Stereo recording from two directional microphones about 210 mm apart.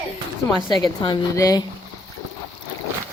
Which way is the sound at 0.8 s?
20° left (ahead or behind).